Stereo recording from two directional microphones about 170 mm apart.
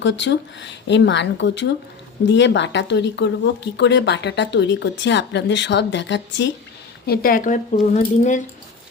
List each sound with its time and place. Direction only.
0.0 s speech: 90° left
7.1 s speech: 60° left (ahead or behind); by 8.4 s 45° left (ahead or behind)